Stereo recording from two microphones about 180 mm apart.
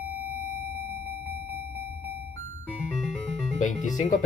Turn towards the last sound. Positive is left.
turn(degrees=45)  # may be behind; listen again after turning